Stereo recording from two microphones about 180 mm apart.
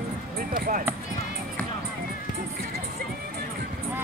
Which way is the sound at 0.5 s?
55° right (ahead or behind).